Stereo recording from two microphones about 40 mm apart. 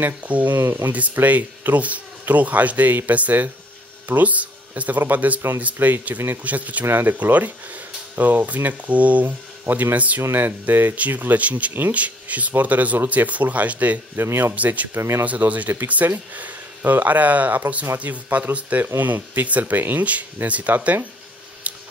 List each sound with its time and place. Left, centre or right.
0.2 s speech: right
0.6 s speech: right
1.1 s speech: right
6.4 s speech: right
6.9 s speech: right
9.7 s speech: right
9.9 s speech: right
14.1 s a man's voice: right
15.2 s speech: right
16.0 s speech: right
16.3 s speech: right
21.7 s scissors: right